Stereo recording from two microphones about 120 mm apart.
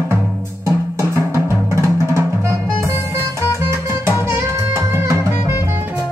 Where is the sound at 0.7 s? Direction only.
20° right (ahead or behind).